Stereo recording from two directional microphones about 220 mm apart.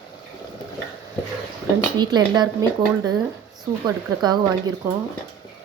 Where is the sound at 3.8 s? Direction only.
20° right (ahead or behind).